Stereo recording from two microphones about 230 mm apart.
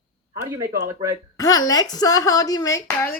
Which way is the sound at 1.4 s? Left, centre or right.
Centre.